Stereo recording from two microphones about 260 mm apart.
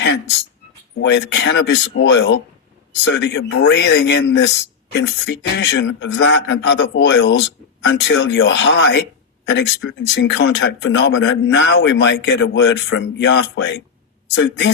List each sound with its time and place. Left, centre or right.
0.9 s speech: left